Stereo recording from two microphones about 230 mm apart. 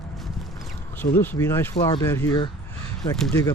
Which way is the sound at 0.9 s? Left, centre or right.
Centre.